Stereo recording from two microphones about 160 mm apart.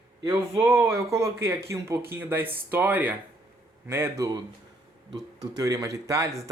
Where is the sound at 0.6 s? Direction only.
15° right (ahead or behind).